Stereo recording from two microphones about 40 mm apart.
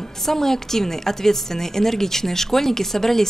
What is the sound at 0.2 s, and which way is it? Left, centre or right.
A woman's voice, centre.